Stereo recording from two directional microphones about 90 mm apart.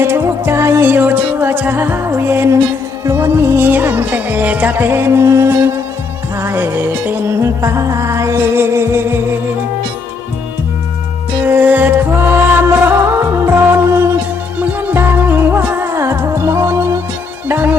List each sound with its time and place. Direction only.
0.0 s music: 25° right (ahead or behind)
11.4 s music: 20° right (ahead or behind)